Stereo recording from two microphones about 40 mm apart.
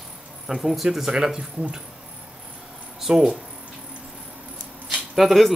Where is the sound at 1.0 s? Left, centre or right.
Centre.